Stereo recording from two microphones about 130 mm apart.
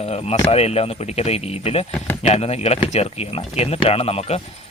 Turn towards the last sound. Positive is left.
turn(degrees=50)  # may be behind; listen again after turning